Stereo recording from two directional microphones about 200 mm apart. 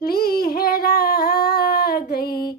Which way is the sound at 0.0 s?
50° left (ahead or behind).